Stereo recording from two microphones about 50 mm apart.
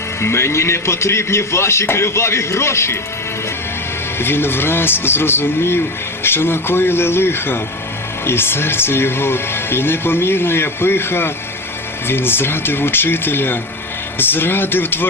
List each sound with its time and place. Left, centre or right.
0.2 s a man's voice: left
4.2 s speech: left